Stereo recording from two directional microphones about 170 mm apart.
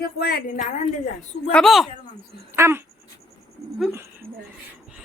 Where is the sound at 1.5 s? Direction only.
Centre (ahead or behind).